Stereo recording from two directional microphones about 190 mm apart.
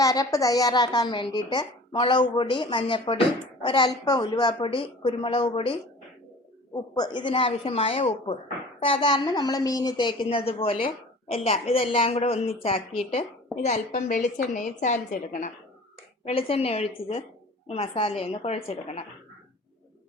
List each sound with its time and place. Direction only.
0.0 s a woman's voice: 20° left (ahead or behind)
6.9 s a woman's voice: 20° left (ahead or behind); by 15.5 s 40° left (ahead or behind)
16.2 s a woman's voice: 30° left (ahead or behind)